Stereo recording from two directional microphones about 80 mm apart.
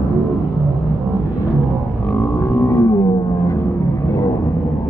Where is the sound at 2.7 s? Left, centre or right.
Left.